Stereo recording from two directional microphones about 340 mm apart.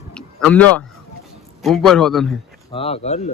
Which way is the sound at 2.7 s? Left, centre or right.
Centre.